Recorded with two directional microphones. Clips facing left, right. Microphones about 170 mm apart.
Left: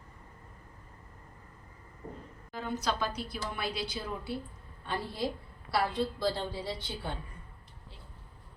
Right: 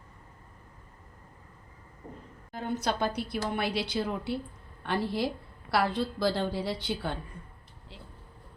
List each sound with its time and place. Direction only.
2.5 s a woman's voice: 55° right (ahead or behind); by 4.4 s 70° right (ahead or behind)
4.8 s a woman's voice: 85° right